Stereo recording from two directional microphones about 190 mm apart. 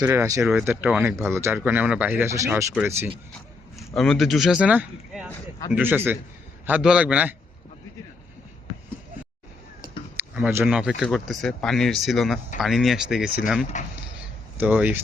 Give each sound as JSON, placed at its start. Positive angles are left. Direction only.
{"t": 0.0, "sound": "speech", "side_deg": -15}
{"t": 3.8, "sound": "speech", "side_deg": 0}
{"t": 10.2, "sound": "speech", "side_deg": -10}
{"t": 13.7, "sound": "speech", "side_deg": 40}
{"t": 14.6, "sound": "speech", "side_deg": -10}